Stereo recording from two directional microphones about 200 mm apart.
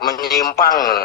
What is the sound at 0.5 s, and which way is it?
Speech, 50° left (ahead or behind).